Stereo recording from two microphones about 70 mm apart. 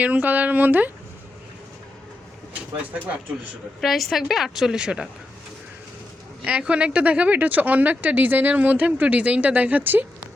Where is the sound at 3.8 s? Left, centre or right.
Centre.